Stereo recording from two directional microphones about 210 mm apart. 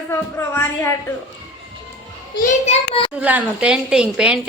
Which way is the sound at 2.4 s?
35° left (ahead or behind).